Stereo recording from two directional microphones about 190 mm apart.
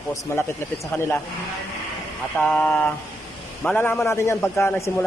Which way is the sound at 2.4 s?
10° left (ahead or behind).